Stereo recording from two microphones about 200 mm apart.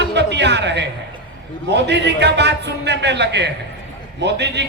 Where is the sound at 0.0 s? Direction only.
60° right (ahead or behind).